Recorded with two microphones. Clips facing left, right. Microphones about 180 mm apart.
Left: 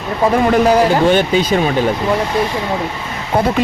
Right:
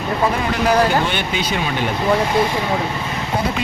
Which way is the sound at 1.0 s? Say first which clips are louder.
Left 9 dB; 40° left (ahead or behind).